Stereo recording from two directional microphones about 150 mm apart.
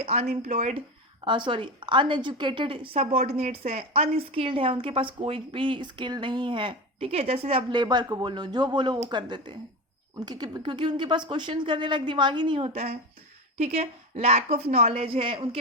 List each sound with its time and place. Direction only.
0.0 s a woman's voice: 45° right (ahead or behind)
1.2 s a woman's voice: 30° right (ahead or behind)